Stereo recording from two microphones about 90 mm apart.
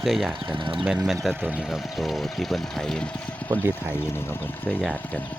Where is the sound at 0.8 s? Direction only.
5° right (ahead or behind).